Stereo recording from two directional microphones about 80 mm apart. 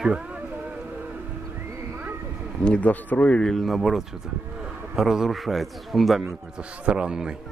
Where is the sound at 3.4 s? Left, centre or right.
Centre.